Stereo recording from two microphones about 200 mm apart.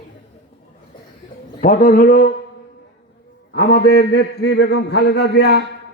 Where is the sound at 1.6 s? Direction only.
40° left (ahead or behind).